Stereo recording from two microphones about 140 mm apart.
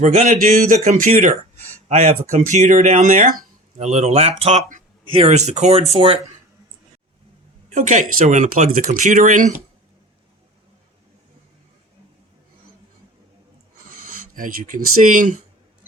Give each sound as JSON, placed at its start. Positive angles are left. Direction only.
{"t": 0.0, "sound": "speech", "side_deg": -60}
{"t": 1.9, "sound": "speech", "side_deg": -50}
{"t": 7.7, "sound": "speech", "side_deg": -60}
{"t": 8.9, "sound": "speech", "side_deg": -60}
{"t": 13.9, "sound": "speech", "side_deg": -75}